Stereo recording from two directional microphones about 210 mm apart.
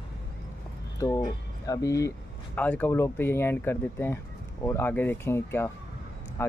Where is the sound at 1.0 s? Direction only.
15° left (ahead or behind).